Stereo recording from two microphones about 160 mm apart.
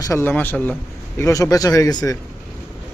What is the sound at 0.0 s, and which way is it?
Speech, 15° left (ahead or behind).